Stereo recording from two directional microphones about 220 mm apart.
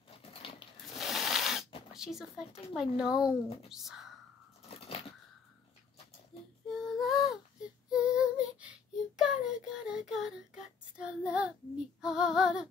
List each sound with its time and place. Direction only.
0.2 s a sound: 25° left (ahead or behind)
0.9 s rub: centre (ahead or behind)
2.0 s speech: centre (ahead or behind)
4.6 s a sound: 25° left (ahead or behind)
6.7 s female singing: centre (ahead or behind)
9.2 s child singing: 5° right (ahead or behind)
12.0 s speech: 5° right (ahead or behind)